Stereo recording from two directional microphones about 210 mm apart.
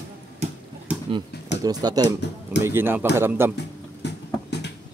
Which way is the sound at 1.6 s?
20° right (ahead or behind).